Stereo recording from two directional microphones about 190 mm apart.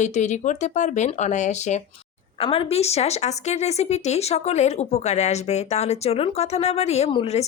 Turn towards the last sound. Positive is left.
turn(degrees=30)  # may be behind; listen again after turning